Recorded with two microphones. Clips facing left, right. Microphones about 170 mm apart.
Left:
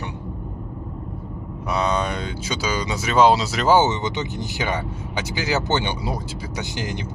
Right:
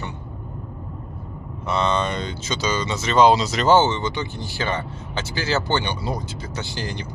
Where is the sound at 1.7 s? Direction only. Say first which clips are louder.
Right 1 dB; 5° left (ahead or behind).